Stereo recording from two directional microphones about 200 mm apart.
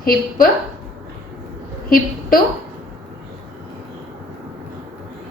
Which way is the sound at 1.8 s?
45° left (ahead or behind).